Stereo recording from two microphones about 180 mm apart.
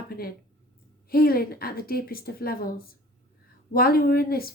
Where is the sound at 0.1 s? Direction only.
55° left (ahead or behind).